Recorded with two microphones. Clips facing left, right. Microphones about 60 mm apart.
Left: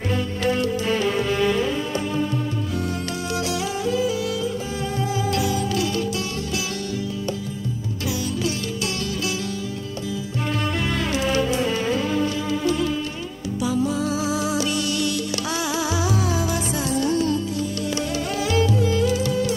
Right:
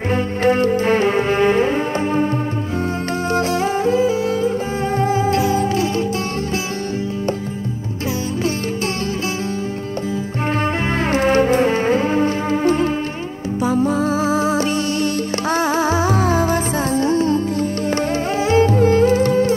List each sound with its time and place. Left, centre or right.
0.1 s music: right
3.3 s music: right
11.1 s music: right